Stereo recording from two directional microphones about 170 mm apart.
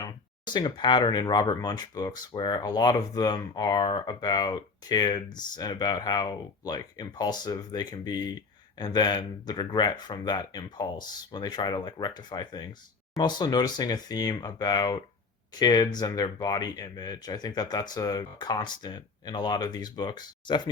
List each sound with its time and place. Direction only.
0.0 s speech: 25° left (ahead or behind)